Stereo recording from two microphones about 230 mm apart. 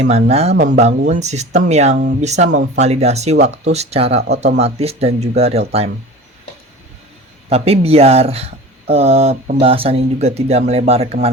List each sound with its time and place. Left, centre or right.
0.3 s speech: right
7.5 s speech: right